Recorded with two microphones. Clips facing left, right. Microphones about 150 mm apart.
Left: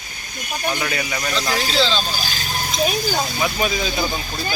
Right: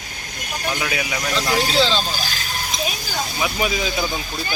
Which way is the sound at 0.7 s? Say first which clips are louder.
Right 2 dB; 5° right (ahead or behind).